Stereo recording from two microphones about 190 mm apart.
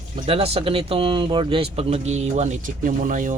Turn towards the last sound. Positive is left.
turn(degrees=-45)  # may be behind; listen again after turning